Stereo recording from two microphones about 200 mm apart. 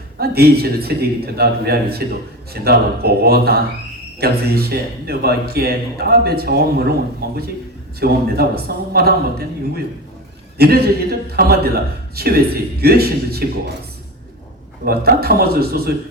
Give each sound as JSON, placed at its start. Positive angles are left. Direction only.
{"t": 0.2, "sound": "a man's voice", "side_deg": -50}
{"t": 14.8, "sound": "a man's voice", "side_deg": -50}